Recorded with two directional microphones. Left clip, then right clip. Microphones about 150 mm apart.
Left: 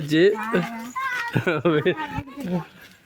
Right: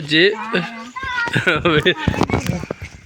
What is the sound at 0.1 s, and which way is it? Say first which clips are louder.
Speech: right 4 dB; 5° left (ahead or behind).